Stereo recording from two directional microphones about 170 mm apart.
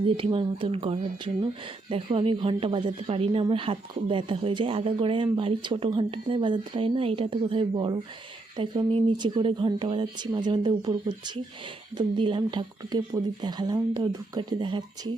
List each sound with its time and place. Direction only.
0.0 s speech: 30° right (ahead or behind)